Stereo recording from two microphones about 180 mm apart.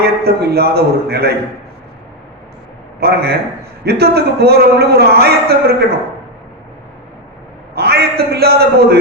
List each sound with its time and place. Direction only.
0.0 s a man's voice: 60° right (ahead or behind)
3.0 s a man's voice: 60° right (ahead or behind)
7.8 s a man's voice: 60° right (ahead or behind)